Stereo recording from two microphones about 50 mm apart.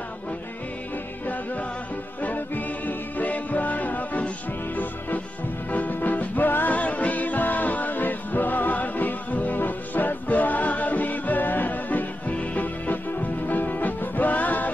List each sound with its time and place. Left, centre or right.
2.2 s music: left
5.7 s music: left